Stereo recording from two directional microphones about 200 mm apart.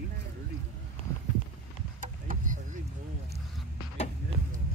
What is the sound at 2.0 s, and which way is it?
Boat, 40° right (ahead or behind).